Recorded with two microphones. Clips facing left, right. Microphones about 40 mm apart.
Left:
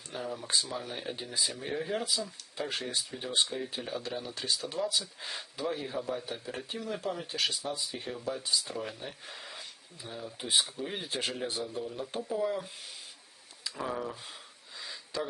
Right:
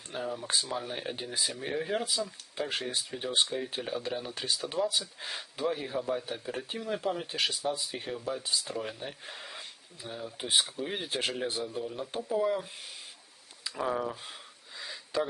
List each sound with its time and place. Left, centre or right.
0.1 s speech: centre
4.0 s speech: centre
7.8 s speech: right
8.0 s speech: centre
14.8 s a sound: centre